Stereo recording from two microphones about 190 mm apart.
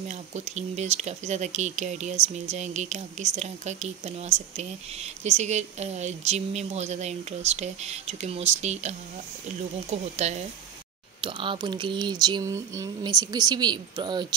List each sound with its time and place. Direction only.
0.1 s a woman's voice: 35° right (ahead or behind)